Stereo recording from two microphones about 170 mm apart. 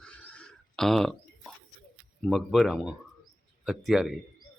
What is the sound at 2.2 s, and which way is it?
Speech, centre (ahead or behind).